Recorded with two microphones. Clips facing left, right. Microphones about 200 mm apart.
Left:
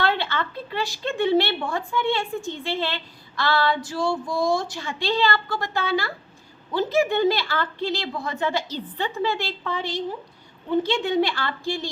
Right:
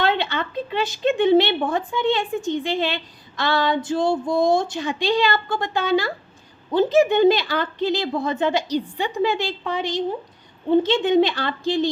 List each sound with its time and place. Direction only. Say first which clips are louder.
0.0 s a woman's voice: right 2 dB; 20° right (ahead or behind)